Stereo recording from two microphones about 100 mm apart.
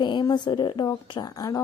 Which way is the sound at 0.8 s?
35° left (ahead or behind).